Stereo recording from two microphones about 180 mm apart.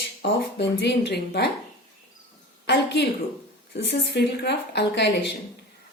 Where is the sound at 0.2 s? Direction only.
70° left (ahead or behind).